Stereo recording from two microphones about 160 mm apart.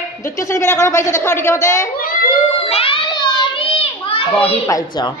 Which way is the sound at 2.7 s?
35° left (ahead or behind).